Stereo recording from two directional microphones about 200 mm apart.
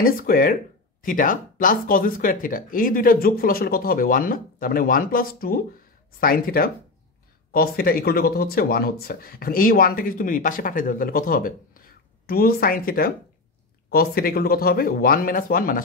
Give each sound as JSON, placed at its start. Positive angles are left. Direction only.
{"t": 0.0, "sound": "speech", "side_deg": 45}